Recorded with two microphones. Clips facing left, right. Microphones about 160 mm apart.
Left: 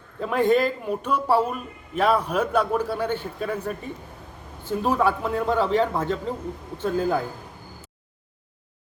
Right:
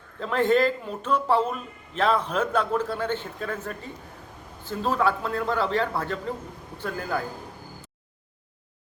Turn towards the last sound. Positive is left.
turn(degrees=20)  # may be behind; listen again after turning